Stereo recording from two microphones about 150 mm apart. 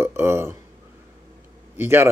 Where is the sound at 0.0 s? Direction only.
15° right (ahead or behind).